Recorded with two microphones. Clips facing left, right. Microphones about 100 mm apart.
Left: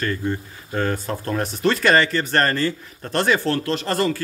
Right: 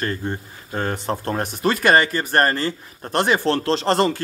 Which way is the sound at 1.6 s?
10° right (ahead or behind).